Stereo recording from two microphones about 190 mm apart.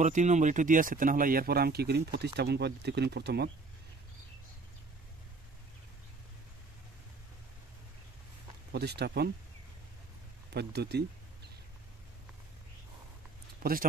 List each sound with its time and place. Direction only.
0.0 s speech: 40° right (ahead or behind); by 3.4 s 60° right (ahead or behind)
8.7 s speech: 60° right (ahead or behind)
10.5 s speech: 60° right (ahead or behind)
13.6 s speech: 50° right (ahead or behind)